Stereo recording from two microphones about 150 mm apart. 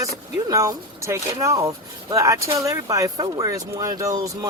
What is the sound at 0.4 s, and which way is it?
Speech, 25° right (ahead or behind).